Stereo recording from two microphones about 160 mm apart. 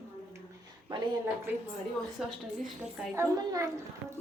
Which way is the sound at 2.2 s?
Centre (ahead or behind).